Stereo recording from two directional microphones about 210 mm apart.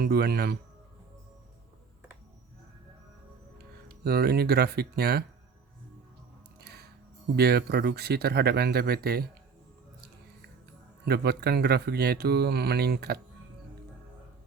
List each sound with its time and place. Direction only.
0.0 s speech: 50° right (ahead or behind)
3.6 s speech: 50° right (ahead or behind)
6.6 s music: 50° right (ahead or behind)
7.3 s speech: 50° right (ahead or behind)
11.0 s speech: 50° right (ahead or behind)